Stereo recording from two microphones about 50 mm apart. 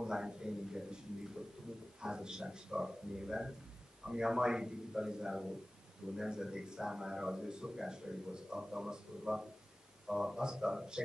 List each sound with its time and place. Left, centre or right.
0.0 s speech: centre
2.0 s speech: centre